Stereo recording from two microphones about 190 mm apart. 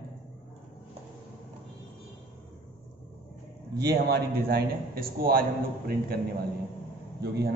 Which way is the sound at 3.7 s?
55° right (ahead or behind).